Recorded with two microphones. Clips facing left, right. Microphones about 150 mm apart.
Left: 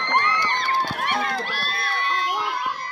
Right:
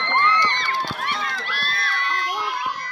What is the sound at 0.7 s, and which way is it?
Run, 50° left (ahead or behind).